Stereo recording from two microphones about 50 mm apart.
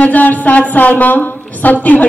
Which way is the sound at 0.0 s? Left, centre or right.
Left.